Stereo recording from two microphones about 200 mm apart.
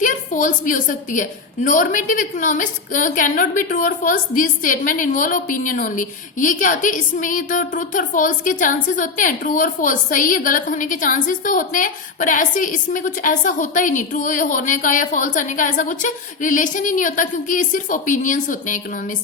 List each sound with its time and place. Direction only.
0.0 s a woman's voice: 40° left (ahead or behind)